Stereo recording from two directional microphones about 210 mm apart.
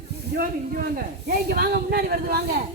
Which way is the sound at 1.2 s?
50° right (ahead or behind).